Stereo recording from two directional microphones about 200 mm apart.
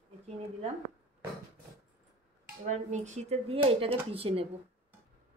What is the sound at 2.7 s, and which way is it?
Speech, 35° right (ahead or behind).